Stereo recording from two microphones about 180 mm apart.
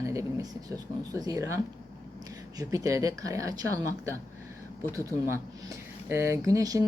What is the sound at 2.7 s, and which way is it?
Speech, 15° right (ahead or behind).